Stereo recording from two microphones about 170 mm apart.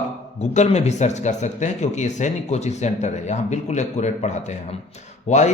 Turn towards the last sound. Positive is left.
turn(degrees=45)  # may be behind; listen again after turning